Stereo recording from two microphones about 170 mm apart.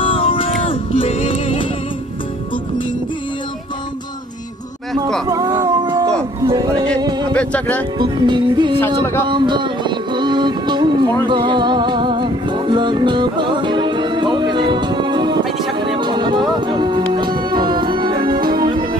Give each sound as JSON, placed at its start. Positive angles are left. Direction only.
{"t": 0.0, "sound": "music", "side_deg": 30}
{"t": 5.3, "sound": "a sound", "side_deg": -20}
{"t": 6.4, "sound": "music", "side_deg": -25}
{"t": 7.3, "sound": "speech", "side_deg": 10}
{"t": 8.0, "sound": "music", "side_deg": -25}